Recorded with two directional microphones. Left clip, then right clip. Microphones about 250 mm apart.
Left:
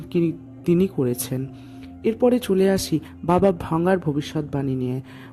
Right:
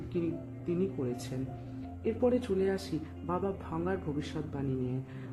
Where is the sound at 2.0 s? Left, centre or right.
Left.